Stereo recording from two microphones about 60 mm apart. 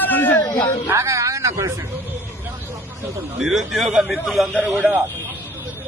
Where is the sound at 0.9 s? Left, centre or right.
Right.